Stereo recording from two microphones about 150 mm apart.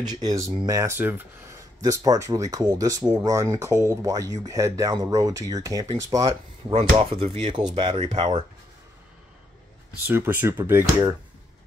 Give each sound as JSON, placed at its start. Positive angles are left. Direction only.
{"t": 0.0, "sound": "speech", "side_deg": -30}
{"t": 7.0, "sound": "speech", "side_deg": -40}
{"t": 10.0, "sound": "speech", "side_deg": -15}